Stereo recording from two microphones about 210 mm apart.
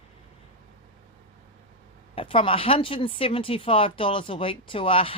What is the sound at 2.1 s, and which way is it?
Speech, 25° left (ahead or behind).